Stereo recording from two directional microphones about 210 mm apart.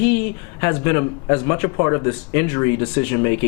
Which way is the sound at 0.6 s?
15° left (ahead or behind).